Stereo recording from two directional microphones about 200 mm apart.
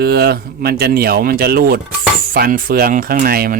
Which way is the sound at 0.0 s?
50° right (ahead or behind).